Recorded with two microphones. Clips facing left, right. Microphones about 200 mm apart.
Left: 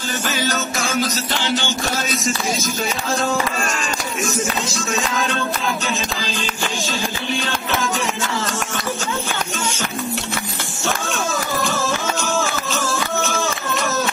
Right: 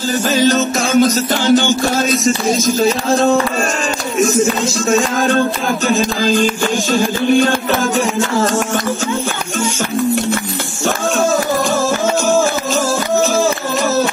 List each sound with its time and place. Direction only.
0.3 s music: 40° right (ahead or behind)
1.0 s music: 45° right (ahead or behind)
2.8 s music: 25° right (ahead or behind)
4.4 s music: 45° right (ahead or behind)
11.7 s music: 40° right (ahead or behind)